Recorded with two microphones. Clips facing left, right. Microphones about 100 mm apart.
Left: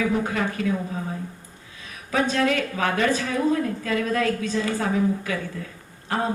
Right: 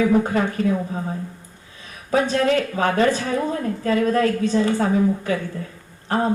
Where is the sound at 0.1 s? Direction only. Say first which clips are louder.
Right 5 dB; 35° right (ahead or behind).